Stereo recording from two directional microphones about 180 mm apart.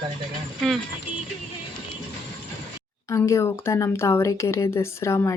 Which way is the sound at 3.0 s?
15° left (ahead or behind).